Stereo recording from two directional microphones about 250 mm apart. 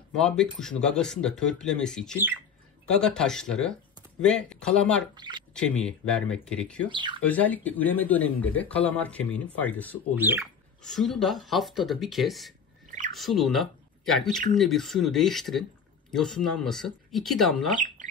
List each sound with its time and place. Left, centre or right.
0.1 s speech: centre
5.1 s speech: centre
5.5 s speech: centre
6.9 s speech: centre
7.2 s speech: centre
10.1 s speech: centre